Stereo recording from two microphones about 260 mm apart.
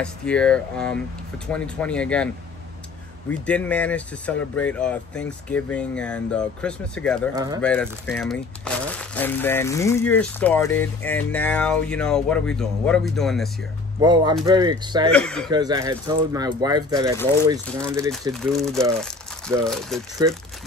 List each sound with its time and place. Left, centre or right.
0.0 s speech: centre
3.3 s speech: centre
13.9 s speech: centre
15.1 s speech: centre
15.5 s speech: centre
18.3 s speech: centre